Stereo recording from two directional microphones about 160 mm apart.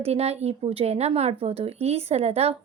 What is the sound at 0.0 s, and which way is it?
Speech, 40° right (ahead or behind).